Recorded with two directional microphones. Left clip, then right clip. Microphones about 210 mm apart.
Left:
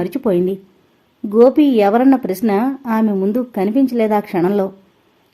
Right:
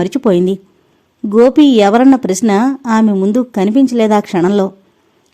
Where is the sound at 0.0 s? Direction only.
40° right (ahead or behind).